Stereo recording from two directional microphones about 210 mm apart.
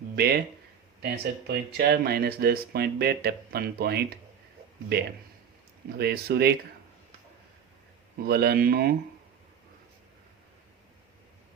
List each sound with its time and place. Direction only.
0.2 s speech: 50° right (ahead or behind)
1.5 s speech: 50° right (ahead or behind)
8.2 s speech: 50° right (ahead or behind)